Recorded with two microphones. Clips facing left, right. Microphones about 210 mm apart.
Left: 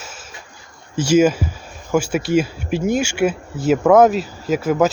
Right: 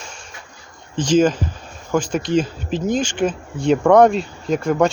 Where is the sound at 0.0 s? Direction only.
5° left (ahead or behind).